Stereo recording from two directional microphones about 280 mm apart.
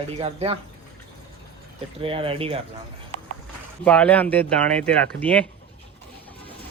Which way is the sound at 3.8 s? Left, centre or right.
Centre.